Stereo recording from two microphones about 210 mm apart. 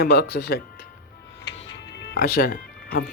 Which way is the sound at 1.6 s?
55° left (ahead or behind).